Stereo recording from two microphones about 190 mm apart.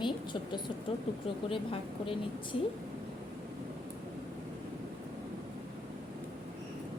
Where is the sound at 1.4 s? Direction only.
30° left (ahead or behind).